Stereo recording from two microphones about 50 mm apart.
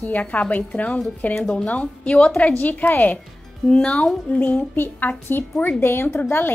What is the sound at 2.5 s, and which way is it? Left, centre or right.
Speech, left.